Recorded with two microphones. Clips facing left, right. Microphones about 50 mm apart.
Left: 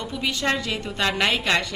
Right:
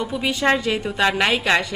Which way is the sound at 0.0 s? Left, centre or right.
Centre.